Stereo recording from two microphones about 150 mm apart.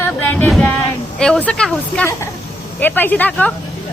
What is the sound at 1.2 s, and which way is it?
A woman's voice, 5° left (ahead or behind).